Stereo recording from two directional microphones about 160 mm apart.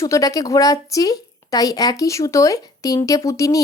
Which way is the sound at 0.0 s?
20° left (ahead or behind).